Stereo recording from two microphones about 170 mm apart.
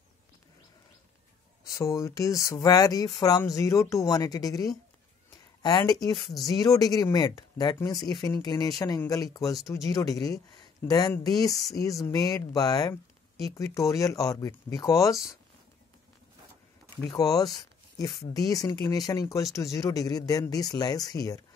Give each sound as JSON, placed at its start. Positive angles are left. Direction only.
{"t": 1.7, "sound": "speech", "side_deg": 20}
{"t": 17.0, "sound": "speech", "side_deg": 20}
{"t": 18.5, "sound": "speech", "side_deg": 25}